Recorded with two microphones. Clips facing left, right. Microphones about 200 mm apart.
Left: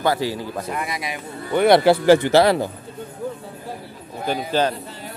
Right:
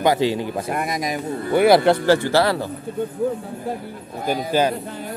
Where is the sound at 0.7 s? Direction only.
45° right (ahead or behind).